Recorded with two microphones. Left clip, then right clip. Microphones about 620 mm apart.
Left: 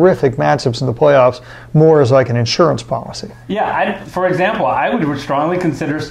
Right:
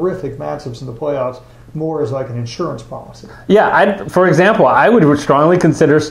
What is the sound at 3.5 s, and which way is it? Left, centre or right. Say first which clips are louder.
Speech: right 6 dB; centre.